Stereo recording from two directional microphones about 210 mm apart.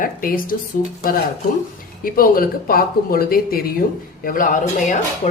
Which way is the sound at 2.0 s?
45° left (ahead or behind).